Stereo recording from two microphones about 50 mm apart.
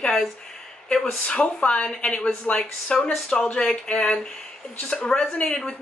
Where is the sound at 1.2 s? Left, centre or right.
Left.